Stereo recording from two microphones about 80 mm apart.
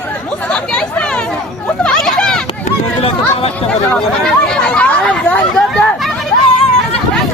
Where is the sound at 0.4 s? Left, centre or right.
Centre.